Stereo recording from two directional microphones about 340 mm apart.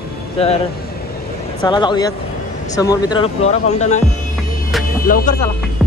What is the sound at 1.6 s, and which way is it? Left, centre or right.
Speech, centre.